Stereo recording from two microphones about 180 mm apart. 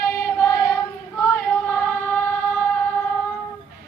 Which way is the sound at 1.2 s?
15° left (ahead or behind).